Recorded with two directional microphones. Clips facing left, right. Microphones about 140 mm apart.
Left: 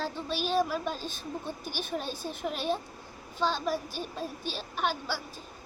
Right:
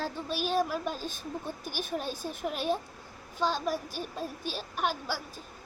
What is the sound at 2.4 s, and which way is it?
Speech, 10° right (ahead or behind).